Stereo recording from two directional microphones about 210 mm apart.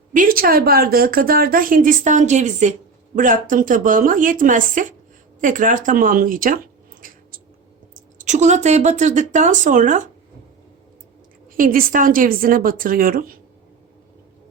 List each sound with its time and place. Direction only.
0.1 s a woman's voice: 40° right (ahead or behind)
7.0 s squish: 40° right (ahead or behind)
8.2 s speech: 35° right (ahead or behind)
11.5 s speech: 40° right (ahead or behind)